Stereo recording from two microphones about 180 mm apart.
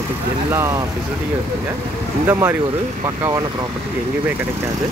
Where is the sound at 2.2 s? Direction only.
10° right (ahead or behind).